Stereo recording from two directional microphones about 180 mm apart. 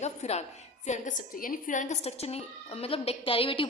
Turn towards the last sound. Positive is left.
turn(degrees=30)  # may be behind; listen again after turning